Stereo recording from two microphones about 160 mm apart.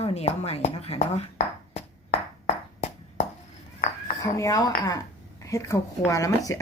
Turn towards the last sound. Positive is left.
turn(degrees=20)  # may be behind; listen again after turning